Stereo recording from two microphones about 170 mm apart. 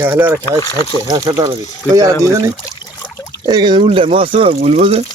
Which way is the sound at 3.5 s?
25° right (ahead or behind).